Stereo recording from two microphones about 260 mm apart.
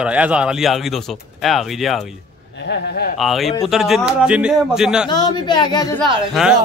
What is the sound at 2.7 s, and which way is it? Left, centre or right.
Speech, left.